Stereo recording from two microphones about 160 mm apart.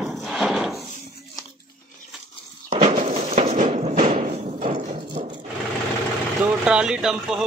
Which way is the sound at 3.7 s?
45° right (ahead or behind).